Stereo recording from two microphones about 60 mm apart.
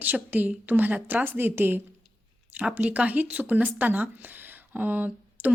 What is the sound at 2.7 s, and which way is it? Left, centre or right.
Speech, right.